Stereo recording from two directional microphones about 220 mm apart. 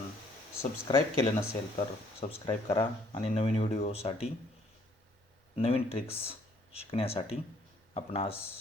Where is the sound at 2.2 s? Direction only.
25° left (ahead or behind).